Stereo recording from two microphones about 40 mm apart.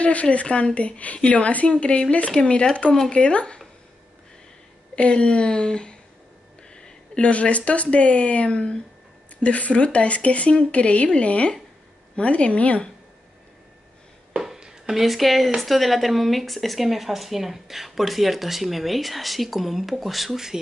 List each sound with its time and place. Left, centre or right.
0.0 s speech: left
4.9 s speech: left
8.5 s speech: centre
9.4 s speech: left
14.6 s speech: centre